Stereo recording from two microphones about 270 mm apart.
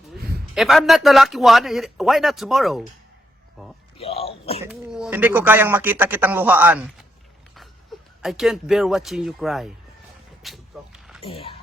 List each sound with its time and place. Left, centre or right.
0.5 s a man's voice: centre
3.9 s a sound: left
4.6 s speech: centre
8.2 s a man's voice: centre
10.4 s a sound: centre
11.2 s speech: left